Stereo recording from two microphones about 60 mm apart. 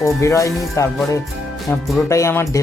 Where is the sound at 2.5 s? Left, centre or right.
Left.